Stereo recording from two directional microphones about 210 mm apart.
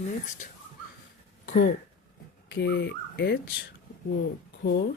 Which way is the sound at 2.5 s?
55° left (ahead or behind).